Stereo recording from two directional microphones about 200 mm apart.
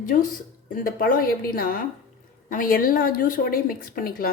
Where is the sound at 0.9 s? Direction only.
45° left (ahead or behind).